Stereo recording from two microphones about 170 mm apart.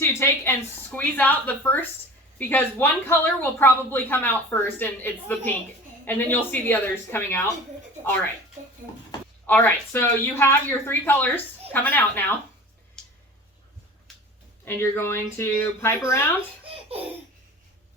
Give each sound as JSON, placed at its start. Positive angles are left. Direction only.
{"t": 0.0, "sound": "a sound", "side_deg": 15}
{"t": 0.9, "sound": "a woman's voice", "side_deg": 10}
{"t": 9.5, "sound": "a woman's voice", "side_deg": 10}
{"t": 13.0, "sound": "a sound", "side_deg": 5}
{"t": 14.6, "sound": "a woman's voice", "side_deg": 15}
{"t": 16.6, "sound": "laughter", "side_deg": -35}